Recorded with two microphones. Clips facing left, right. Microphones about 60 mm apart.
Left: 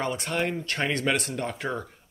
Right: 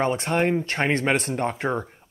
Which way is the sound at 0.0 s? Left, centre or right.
Right.